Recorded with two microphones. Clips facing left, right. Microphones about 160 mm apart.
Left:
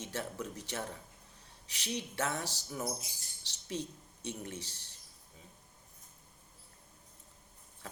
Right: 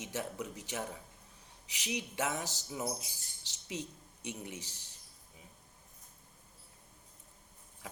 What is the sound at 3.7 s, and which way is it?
Speech, 15° right (ahead or behind).